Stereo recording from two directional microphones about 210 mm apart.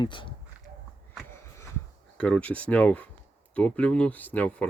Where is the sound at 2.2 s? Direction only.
5° left (ahead or behind).